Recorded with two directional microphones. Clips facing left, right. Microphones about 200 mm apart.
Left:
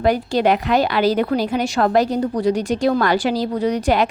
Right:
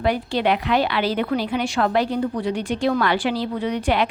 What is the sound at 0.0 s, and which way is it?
A woman's voice, 45° left (ahead or behind).